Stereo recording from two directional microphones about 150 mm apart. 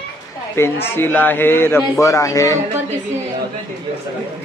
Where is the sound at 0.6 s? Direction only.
15° left (ahead or behind).